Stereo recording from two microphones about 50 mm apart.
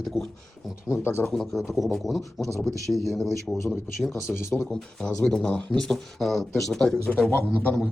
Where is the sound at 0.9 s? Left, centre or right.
Left.